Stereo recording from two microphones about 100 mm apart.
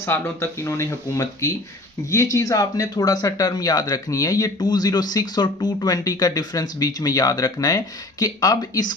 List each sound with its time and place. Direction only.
0.0 s speech: 25° left (ahead or behind); by 9.0 s 40° left (ahead or behind)